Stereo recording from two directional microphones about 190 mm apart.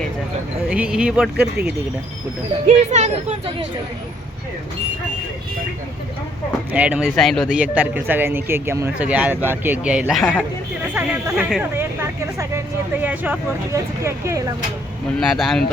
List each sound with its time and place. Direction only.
0.7 s speech: 5° right (ahead or behind)
2.6 s speech: 35° right (ahead or behind)
6.7 s speech: 5° right (ahead or behind)
15.3 s speech: centre (ahead or behind)